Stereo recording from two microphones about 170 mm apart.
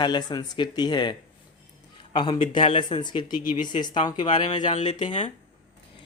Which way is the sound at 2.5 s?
30° left (ahead or behind).